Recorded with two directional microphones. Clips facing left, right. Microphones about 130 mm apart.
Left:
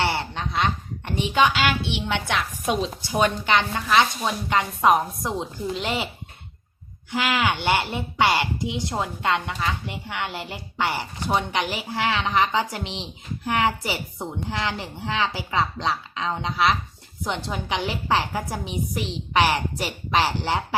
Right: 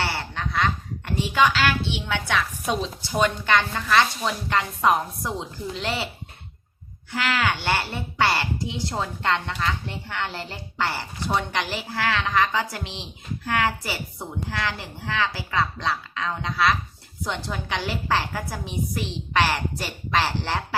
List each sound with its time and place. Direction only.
0.0 s a woman's voice: 20° left (ahead or behind)
7.1 s a woman's voice: 20° left (ahead or behind)